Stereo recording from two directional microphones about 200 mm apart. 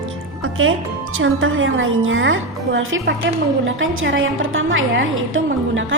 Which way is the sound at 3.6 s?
75° right (ahead or behind).